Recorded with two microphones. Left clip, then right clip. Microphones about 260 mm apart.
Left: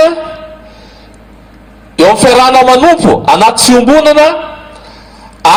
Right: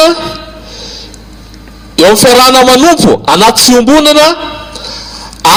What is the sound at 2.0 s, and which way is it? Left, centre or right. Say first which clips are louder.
A man's voice: right 1 dB; right.